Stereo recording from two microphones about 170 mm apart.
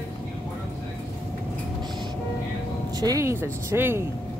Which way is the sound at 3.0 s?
20° right (ahead or behind).